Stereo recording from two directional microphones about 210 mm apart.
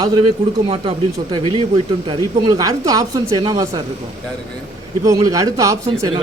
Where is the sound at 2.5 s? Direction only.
15° right (ahead or behind).